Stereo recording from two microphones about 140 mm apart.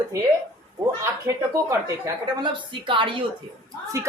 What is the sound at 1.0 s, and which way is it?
Speech, 25° right (ahead or behind).